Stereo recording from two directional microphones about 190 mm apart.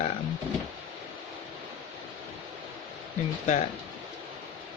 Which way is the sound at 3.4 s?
40° left (ahead or behind).